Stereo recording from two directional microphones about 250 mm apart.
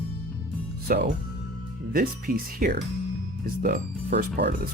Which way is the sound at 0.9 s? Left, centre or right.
Right.